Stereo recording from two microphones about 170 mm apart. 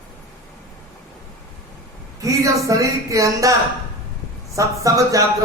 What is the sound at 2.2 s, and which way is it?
A man's voice, 20° right (ahead or behind).